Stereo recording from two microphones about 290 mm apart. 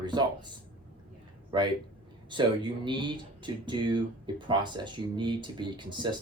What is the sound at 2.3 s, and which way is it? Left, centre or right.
Speech, centre.